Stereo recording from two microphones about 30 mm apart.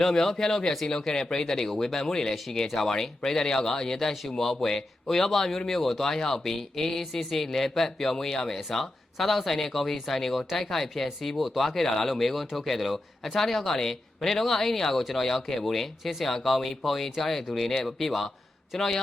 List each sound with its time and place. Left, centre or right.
0.0 s speech: centre
4.1 s speech: centre
4.4 s speech: centre
9.1 s speech: centre
11.7 s speech: centre
18.8 s speech: centre